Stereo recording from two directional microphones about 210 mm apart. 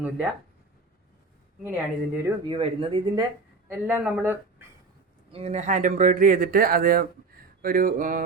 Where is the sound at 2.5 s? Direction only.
25° right (ahead or behind).